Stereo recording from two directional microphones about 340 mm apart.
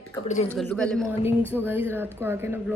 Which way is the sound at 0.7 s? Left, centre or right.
Centre.